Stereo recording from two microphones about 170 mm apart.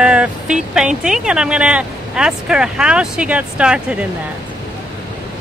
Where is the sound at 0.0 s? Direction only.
5° right (ahead or behind).